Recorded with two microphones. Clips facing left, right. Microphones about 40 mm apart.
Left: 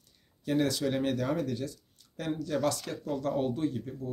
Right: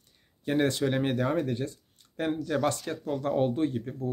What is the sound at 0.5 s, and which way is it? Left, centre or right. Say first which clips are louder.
Speech: right 2 dB; right.